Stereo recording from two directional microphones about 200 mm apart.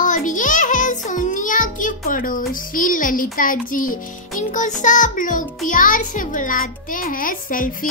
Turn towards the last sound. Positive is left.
turn(degrees=45)  # may be behind; listen again after turning